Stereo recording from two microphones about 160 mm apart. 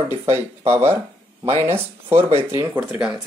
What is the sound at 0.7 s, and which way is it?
Speech, 15° right (ahead or behind).